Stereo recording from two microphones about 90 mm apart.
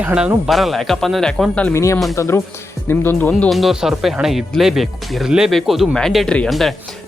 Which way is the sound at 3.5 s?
Centre (ahead or behind).